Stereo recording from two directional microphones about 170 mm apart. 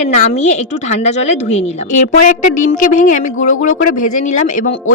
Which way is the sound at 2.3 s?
50° left (ahead or behind).